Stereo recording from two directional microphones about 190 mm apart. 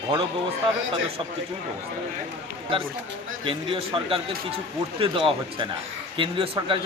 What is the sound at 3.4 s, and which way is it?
Speech, 30° right (ahead or behind).